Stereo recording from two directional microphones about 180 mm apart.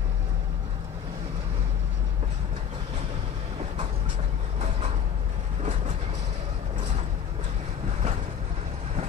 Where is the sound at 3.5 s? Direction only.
35° right (ahead or behind).